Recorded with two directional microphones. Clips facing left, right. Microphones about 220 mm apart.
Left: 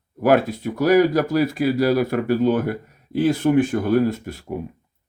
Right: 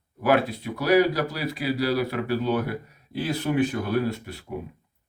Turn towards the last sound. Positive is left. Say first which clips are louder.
# left 5 dB
turn(degrees=45)  # may be behind; listen again after turning